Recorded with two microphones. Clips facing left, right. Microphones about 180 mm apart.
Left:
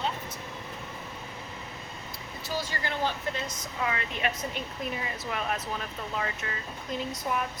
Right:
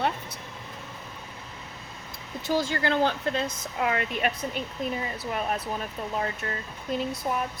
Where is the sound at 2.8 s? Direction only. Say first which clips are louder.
Right 6 dB; 80° right.